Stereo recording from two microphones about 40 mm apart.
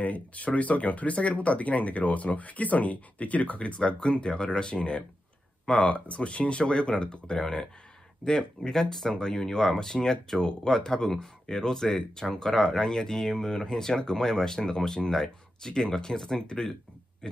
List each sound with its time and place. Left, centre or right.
0.0 s speech: left; by 17.4 s centre